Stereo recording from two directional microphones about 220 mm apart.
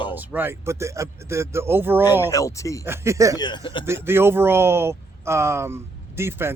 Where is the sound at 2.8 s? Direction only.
10° right (ahead or behind).